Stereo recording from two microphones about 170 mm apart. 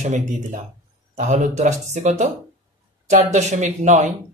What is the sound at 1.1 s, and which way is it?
Speech, 45° right (ahead or behind).